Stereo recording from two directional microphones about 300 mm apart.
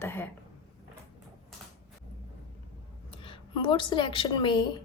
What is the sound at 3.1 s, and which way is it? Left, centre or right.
A woman's voice, centre.